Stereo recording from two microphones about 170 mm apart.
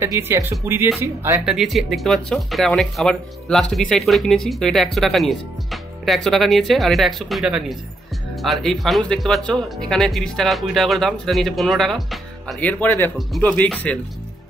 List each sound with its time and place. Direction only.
0.0 s speech: 15° right (ahead or behind)
1.4 s speech: 5° right (ahead or behind)